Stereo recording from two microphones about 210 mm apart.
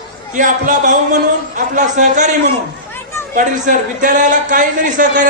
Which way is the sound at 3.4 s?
35° right (ahead or behind).